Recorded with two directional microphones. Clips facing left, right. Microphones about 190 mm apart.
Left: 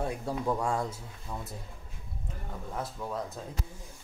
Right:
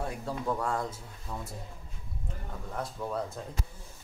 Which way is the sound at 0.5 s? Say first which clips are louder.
Left 1 dB; 10° left (ahead or behind).